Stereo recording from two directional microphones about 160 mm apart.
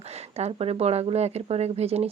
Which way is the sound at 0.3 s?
40° right (ahead or behind).